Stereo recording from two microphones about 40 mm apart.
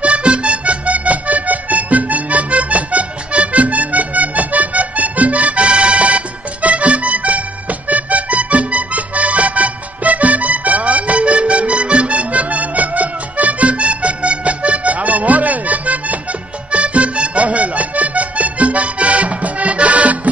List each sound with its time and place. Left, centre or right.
0.0 s accordion: right